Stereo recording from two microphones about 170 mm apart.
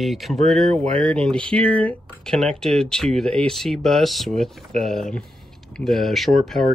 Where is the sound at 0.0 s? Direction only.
Centre (ahead or behind).